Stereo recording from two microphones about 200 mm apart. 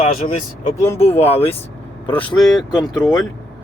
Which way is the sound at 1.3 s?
30° left (ahead or behind).